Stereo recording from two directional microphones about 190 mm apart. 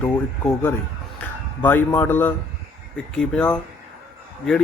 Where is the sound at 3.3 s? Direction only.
5° left (ahead or behind).